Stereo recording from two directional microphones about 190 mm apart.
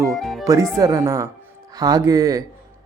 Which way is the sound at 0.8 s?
15° right (ahead or behind).